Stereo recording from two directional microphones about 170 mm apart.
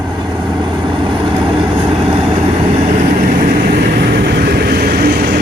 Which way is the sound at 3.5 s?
65° right (ahead or behind).